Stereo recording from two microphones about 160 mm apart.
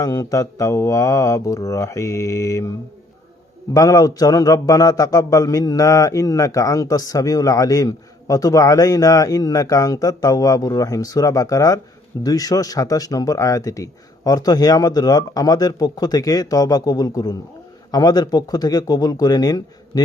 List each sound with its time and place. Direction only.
0.0 s a man's voice: 20° left (ahead or behind)
3.8 s a man's voice: 20° left (ahead or behind)